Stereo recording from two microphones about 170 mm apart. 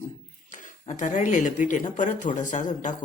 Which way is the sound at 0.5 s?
50° left (ahead or behind).